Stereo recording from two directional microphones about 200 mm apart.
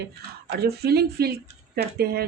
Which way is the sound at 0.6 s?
55° right (ahead or behind).